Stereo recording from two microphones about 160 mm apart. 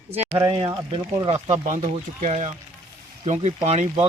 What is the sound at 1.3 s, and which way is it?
Speech, 45° right (ahead or behind).